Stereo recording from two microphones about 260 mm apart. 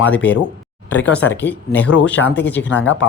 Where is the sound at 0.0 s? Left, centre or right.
Centre.